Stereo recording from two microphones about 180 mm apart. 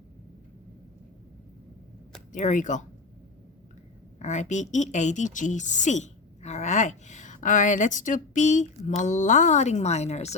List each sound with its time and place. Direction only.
2.3 s speech: 45° left (ahead or behind)
4.2 s a woman's voice: 40° left (ahead or behind)